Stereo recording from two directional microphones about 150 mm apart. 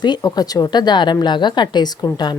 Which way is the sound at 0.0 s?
30° left (ahead or behind).